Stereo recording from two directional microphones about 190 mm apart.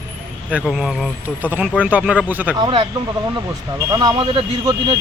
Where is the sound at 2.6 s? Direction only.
25° right (ahead or behind).